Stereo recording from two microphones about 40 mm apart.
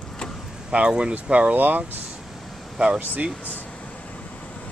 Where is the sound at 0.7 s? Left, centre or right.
Right.